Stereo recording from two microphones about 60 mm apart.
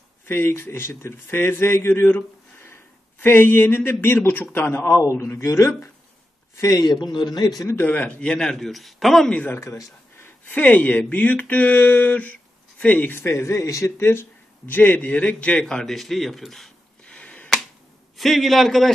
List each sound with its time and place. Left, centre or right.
0.2 s speech: left
5.4 s speech: left
6.6 s speech: left
7.7 s a man's voice: left; by 9.3 s centre
10.5 s speech: left
14.7 s speech: left
15.6 s speech: centre
17.0 s a sound: centre
18.1 s speech: centre